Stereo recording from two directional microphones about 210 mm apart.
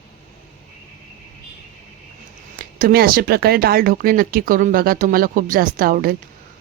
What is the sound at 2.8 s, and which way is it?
Speech, 45° right (ahead or behind).